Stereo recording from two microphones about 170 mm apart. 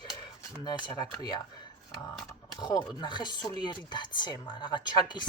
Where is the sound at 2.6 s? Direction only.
25° left (ahead or behind).